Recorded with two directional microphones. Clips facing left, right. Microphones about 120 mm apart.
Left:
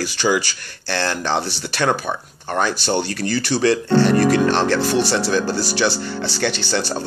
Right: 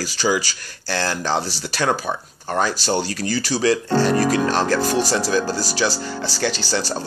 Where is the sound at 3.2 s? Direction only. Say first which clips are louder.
Left 2 dB; 60° left (ahead or behind).